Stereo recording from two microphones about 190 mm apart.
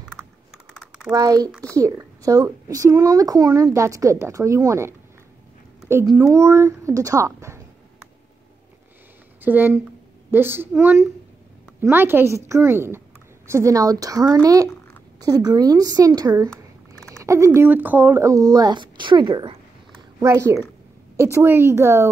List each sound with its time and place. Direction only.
0.7 s typing: 5° right (ahead or behind)
1.1 s a woman's voice: 20° right (ahead or behind)
6.1 s a woman's voice: 15° right (ahead or behind)
9.4 s a woman's voice: 10° right (ahead or behind)
17.1 s a sound: 15° right (ahead or behind)
17.6 s a woman's voice: 10° right (ahead or behind)